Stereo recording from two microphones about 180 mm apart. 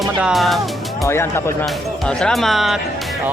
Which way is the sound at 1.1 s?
15° left (ahead or behind).